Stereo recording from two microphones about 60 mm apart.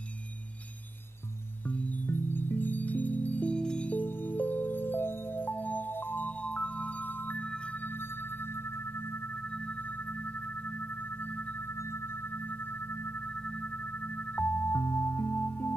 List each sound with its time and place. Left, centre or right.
2.0 s chime: left; by 4.0 s centre
4.0 s music: left
14.1 s music: left